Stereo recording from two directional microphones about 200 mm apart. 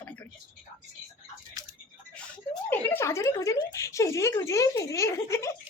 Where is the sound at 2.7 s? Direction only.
10° left (ahead or behind).